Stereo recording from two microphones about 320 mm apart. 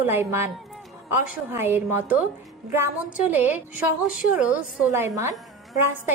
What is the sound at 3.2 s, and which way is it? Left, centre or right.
A woman's voice, centre.